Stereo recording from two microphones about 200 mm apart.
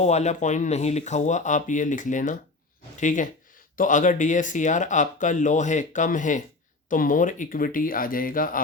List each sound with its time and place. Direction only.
0.0 s speech: 35° left (ahead or behind)